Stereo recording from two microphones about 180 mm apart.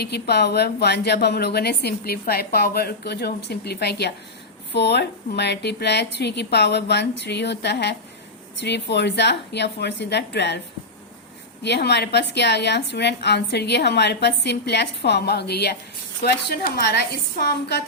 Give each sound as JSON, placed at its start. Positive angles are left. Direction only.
{"t": 0.0, "sound": "a woman's voice", "side_deg": 65}
{"t": 11.6, "sound": "a woman's voice", "side_deg": 70}